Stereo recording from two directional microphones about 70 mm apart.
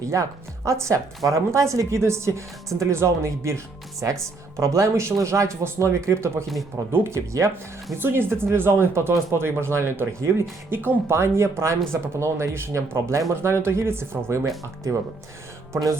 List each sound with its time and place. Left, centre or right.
0.1 s speech: right
7.9 s speech: right